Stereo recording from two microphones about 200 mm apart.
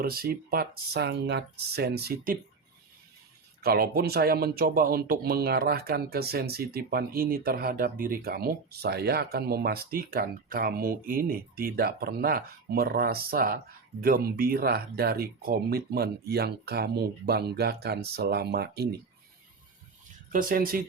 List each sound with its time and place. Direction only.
0.0 s speech: 50° right (ahead or behind)
3.6 s speech: 50° right (ahead or behind)
20.3 s speech: 45° right (ahead or behind)